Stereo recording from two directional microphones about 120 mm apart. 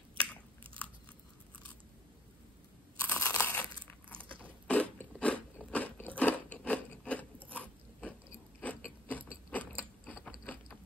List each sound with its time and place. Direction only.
3.0 s crunch: 15° left (ahead or behind)
4.6 s biting: 10° left (ahead or behind)
8.5 s gears: 15° left (ahead or behind)
10.2 s mechanisms: 15° left (ahead or behind)